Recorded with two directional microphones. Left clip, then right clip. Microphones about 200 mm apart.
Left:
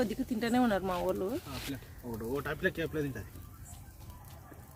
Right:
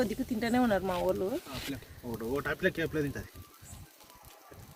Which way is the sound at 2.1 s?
30° right (ahead or behind).